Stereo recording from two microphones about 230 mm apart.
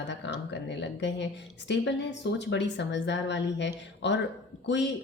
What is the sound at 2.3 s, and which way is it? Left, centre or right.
Speech, left.